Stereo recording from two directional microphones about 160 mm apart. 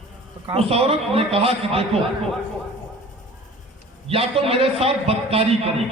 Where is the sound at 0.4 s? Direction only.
35° right (ahead or behind).